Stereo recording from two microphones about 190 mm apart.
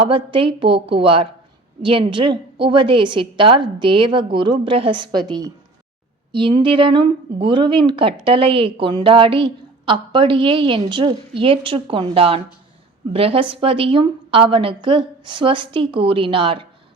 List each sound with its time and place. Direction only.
0.0 s speech: 25° right (ahead or behind)